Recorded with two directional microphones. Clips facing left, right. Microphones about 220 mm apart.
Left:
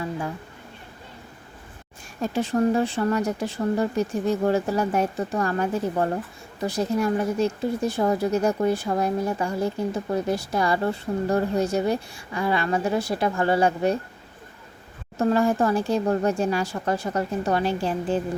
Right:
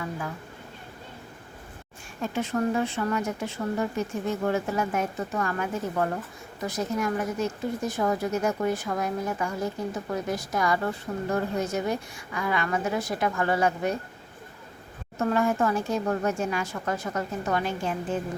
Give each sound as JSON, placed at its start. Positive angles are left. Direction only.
{"t": 2.2, "sound": "a woman's voice", "side_deg": 35}
{"t": 15.2, "sound": "a woman's voice", "side_deg": 30}